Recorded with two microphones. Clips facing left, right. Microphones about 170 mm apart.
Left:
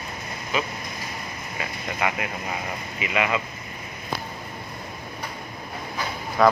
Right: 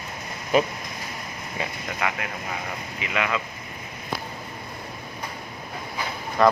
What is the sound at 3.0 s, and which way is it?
Speech, 10° left (ahead or behind).